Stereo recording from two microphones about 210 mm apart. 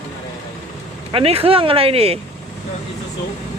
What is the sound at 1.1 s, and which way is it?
Speech, 25° right (ahead or behind).